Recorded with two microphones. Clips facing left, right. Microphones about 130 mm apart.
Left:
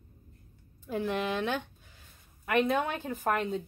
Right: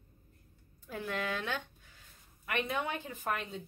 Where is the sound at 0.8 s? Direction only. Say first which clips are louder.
Left 6 dB; 25° left (ahead or behind).